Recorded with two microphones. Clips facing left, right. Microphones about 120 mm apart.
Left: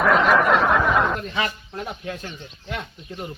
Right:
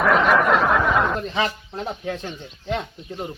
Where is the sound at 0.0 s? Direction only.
Centre (ahead or behind).